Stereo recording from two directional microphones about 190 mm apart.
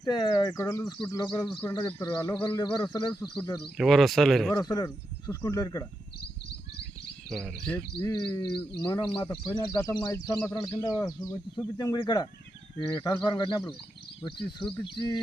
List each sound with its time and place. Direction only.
0.0 s a man's voice: 20° left (ahead or behind)
3.6 s speech: centre (ahead or behind)
4.5 s a man's voice: 20° left (ahead or behind)
7.3 s speech: centre (ahead or behind)
7.9 s a man's voice: 25° left (ahead or behind)
14.9 s a man's voice: 25° left (ahead or behind)